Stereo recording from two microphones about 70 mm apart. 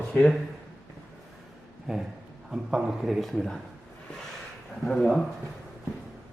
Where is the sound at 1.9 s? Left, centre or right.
Centre.